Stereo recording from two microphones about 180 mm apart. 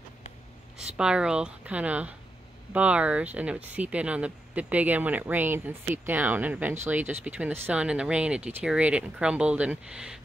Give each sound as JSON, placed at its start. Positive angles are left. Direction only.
{"t": 0.9, "sound": "speech", "side_deg": -5}